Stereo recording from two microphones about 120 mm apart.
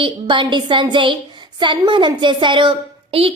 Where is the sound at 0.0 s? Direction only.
45° right (ahead or behind).